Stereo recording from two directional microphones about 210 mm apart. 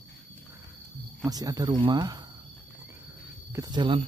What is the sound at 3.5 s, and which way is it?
Speech, 20° right (ahead or behind).